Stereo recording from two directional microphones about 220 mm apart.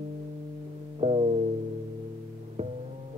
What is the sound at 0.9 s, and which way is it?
Music, 25° right (ahead or behind).